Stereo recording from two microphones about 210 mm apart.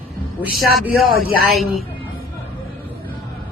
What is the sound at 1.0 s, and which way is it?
Speech, 80° left.